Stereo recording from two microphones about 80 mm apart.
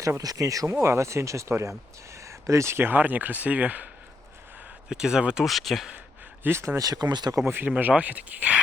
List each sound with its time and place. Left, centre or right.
0.2 s speech: right; by 3.8 s centre
4.9 s speech: centre
6.4 s speech: right
6.7 s speech: right
7.5 s speech: right